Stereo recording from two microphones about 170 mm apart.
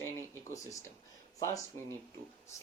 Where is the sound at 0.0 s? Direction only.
20° left (ahead or behind).